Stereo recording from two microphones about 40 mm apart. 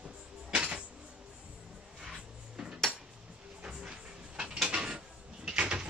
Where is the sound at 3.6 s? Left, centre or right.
Right.